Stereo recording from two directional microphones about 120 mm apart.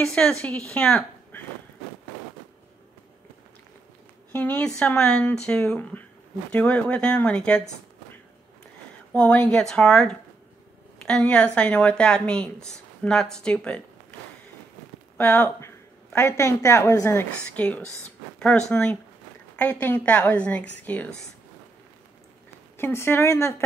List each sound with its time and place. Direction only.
0.0 s speech: 5° left (ahead or behind)
4.3 s a woman's voice: 15° left (ahead or behind)
9.1 s a woman's voice: 10° left (ahead or behind)
15.1 s speech: 20° left (ahead or behind)
17.6 s a woman's voice: 10° left (ahead or behind)
22.8 s a woman's voice: 20° left (ahead or behind)